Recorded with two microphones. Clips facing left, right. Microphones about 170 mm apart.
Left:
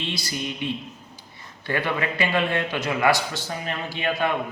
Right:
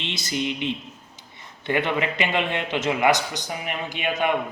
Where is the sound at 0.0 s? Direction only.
20° right (ahead or behind).